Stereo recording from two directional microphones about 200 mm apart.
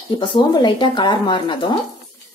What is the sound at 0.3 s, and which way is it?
A woman's voice, 20° left (ahead or behind).